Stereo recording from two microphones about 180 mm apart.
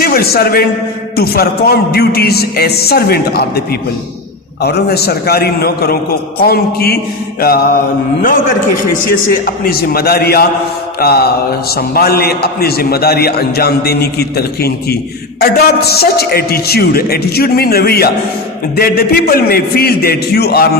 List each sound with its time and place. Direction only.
0.0 s a man's voice: 55° left (ahead or behind)